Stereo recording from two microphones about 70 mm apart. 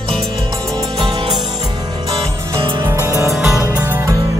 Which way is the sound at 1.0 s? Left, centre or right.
Right.